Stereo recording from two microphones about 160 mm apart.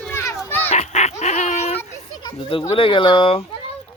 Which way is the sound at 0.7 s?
45° left (ahead or behind).